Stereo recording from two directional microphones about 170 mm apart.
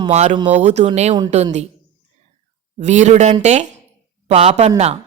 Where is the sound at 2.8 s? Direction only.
45° right (ahead or behind).